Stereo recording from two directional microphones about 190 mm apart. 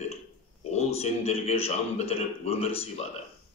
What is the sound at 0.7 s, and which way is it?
A man's voice, 35° left (ahead or behind).